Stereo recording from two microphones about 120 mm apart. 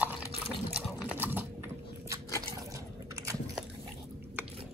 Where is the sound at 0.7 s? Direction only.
15° right (ahead or behind).